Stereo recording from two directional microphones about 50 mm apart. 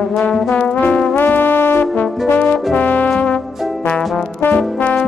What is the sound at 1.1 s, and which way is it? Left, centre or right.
Music, left.